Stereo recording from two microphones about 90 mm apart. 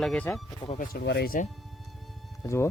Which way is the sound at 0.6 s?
55° left (ahead or behind).